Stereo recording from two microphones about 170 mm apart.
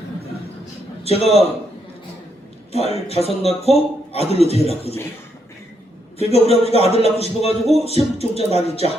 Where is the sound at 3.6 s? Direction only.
35° left (ahead or behind).